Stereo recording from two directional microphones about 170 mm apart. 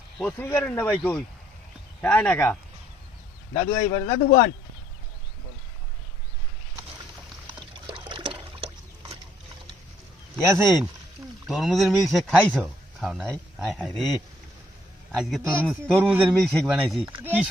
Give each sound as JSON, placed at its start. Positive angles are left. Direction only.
{"t": 0.2, "sound": "speech", "side_deg": 10}
{"t": 3.5, "sound": "a man's voice", "side_deg": 40}
{"t": 7.9, "sound": "trickle", "side_deg": -30}
{"t": 11.4, "sound": "speech", "side_deg": 0}
{"t": 15.1, "sound": "speech", "side_deg": -5}